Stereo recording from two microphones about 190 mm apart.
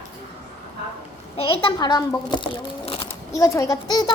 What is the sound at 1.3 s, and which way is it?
A woman's voice, 25° left (ahead or behind).